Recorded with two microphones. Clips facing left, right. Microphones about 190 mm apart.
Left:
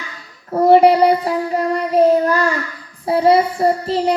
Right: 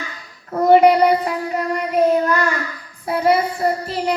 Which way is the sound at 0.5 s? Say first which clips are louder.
Left 2 dB; 30° left (ahead or behind).